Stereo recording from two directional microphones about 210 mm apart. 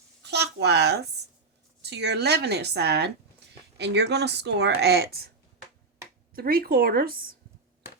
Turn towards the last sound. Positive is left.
turn(degrees=-45)  # may be behind; listen again after turning